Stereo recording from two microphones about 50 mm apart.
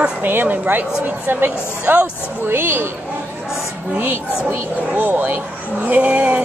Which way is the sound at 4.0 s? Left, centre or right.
Right.